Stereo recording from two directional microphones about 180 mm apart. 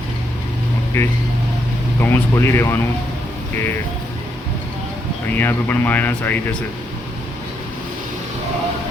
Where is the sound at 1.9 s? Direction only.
15° left (ahead or behind).